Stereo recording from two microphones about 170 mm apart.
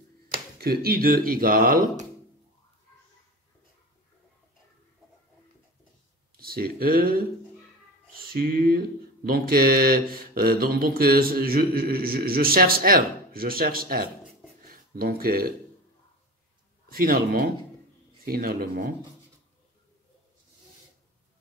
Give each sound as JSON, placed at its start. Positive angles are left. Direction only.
{"t": 0.3, "sound": "speech", "side_deg": -65}
{"t": 6.3, "sound": "speech", "side_deg": -60}
{"t": 8.1, "sound": "a sound", "side_deg": -60}
{"t": 9.3, "sound": "mantra", "side_deg": -60}
{"t": 14.7, "sound": "speech", "side_deg": -60}
{"t": 16.9, "sound": "mantra", "side_deg": -60}